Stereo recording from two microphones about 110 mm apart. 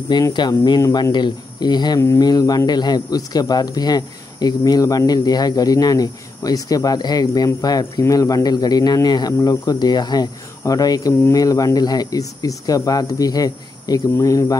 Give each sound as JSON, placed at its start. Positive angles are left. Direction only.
{"t": 0.1, "sound": "speech", "side_deg": 40}